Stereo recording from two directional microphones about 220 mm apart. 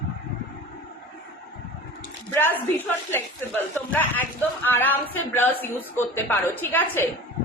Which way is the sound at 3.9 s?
10° left (ahead or behind).